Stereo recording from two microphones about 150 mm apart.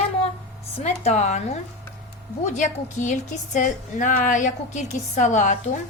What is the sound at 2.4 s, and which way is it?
Speech, 50° left (ahead or behind).